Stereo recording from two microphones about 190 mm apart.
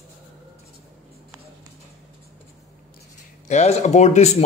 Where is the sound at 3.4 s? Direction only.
40° left (ahead or behind).